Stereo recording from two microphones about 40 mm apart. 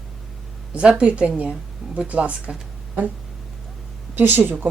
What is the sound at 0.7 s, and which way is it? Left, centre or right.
A woman's voice, right.